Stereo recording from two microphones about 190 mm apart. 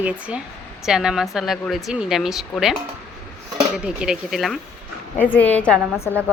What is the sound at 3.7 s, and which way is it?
Speech, 5° right (ahead or behind).